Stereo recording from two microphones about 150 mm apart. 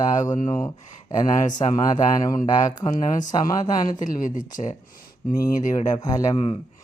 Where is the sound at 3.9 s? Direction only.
60° left (ahead or behind).